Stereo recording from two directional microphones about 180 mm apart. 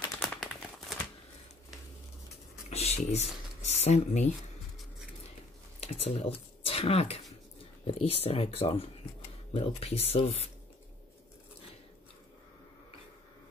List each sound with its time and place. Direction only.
0.2 s a sound: centre (ahead or behind)
2.7 s speech: 35° left (ahead or behind)
5.8 s speech: 30° left (ahead or behind)